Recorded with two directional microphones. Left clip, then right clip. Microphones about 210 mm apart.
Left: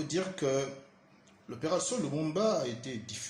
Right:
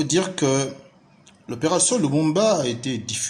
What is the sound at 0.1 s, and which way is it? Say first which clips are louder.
A man's voice: right 8 dB; 45° right (ahead or behind).